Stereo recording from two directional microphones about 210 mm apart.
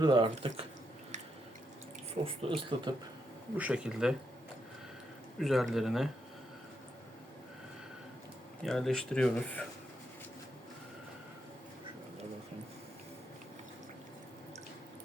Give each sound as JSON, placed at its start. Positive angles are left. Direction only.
{"t": 0.0, "sound": "speech", "side_deg": -20}
{"t": 2.2, "sound": "speech", "side_deg": -25}
{"t": 3.6, "sound": "speech", "side_deg": -5}
{"t": 5.4, "sound": "speech", "side_deg": 0}
{"t": 8.6, "sound": "speech", "side_deg": 0}